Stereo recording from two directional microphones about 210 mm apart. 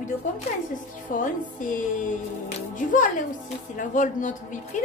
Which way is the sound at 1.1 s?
40° left (ahead or behind).